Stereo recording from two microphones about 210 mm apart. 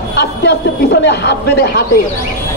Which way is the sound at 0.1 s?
50° left (ahead or behind).